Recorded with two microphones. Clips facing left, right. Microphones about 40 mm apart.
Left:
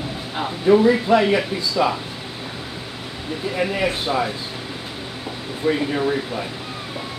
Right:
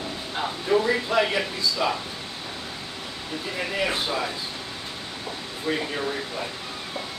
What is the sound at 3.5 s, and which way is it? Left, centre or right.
Speech, centre.